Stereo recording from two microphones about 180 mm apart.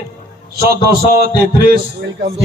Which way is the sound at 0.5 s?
55° right (ahead or behind).